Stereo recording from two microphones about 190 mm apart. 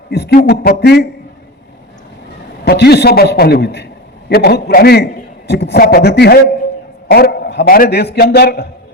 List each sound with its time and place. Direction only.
0.1 s a man's voice: 60° left (ahead or behind)
2.6 s a man's voice: 60° left (ahead or behind)